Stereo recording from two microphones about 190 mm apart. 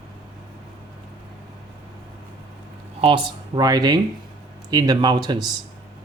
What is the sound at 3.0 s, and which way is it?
Speech, 25° right (ahead or behind).